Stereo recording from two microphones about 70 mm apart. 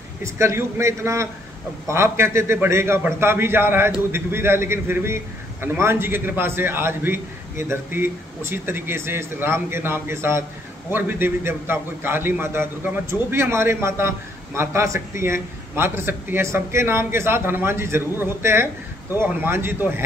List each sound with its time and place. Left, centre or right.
0.2 s a man's voice: right